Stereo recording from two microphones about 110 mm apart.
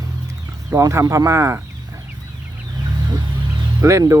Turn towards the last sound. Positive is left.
turn(degrees=-30)  # may be behind; listen again after turning